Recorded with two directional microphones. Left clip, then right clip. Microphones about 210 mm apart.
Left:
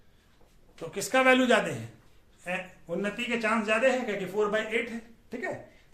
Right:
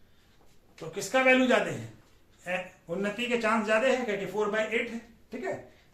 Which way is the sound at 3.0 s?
5° left (ahead or behind).